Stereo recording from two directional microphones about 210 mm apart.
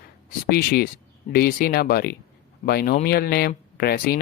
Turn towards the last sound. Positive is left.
turn(degrees=45)  # may be behind; listen again after turning